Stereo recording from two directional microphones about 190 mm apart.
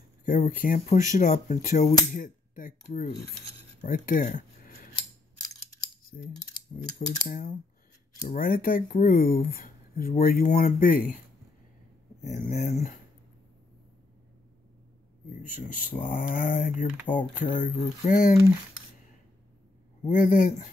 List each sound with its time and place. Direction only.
0.2 s speech: 45° left (ahead or behind)
6.1 s mechanisms: 45° left (ahead or behind)
7.1 s speech: 45° left (ahead or behind)
12.3 s speech: 45° left (ahead or behind)
15.2 s speech: 40° left (ahead or behind)
17.1 s speech: 25° left (ahead or behind)
17.6 s speech: 45° left (ahead or behind)
20.1 s speech: 50° left (ahead or behind)